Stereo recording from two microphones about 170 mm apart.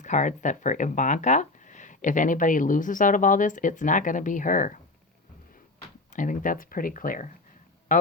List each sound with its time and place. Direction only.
0.0 s speech: 45° left (ahead or behind)
6.1 s speech: 50° left (ahead or behind)